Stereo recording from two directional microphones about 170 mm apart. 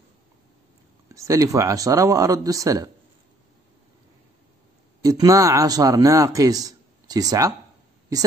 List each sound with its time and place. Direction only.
1.0 s speech: 20° right (ahead or behind)
5.0 s speech: 20° right (ahead or behind)